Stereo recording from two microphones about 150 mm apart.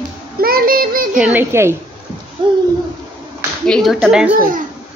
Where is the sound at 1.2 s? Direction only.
10° right (ahead or behind).